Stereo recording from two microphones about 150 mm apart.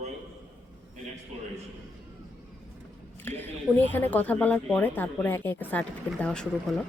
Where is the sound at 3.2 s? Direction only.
15° left (ahead or behind).